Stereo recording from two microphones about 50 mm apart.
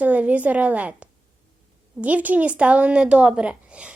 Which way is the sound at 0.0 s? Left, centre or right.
Right.